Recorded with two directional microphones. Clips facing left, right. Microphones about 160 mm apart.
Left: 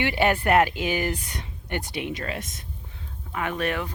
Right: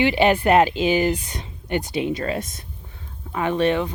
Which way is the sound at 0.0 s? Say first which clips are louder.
Right 5 dB; 20° right (ahead or behind).